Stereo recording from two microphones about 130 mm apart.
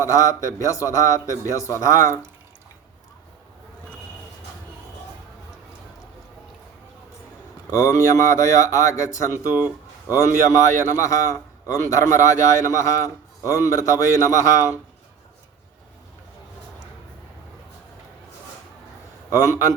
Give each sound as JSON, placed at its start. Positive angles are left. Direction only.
{"t": 0.0, "sound": "a man's voice", "side_deg": 25}
{"t": 7.7, "sound": "a man's voice", "side_deg": 20}
{"t": 19.3, "sound": "a man's voice", "side_deg": 20}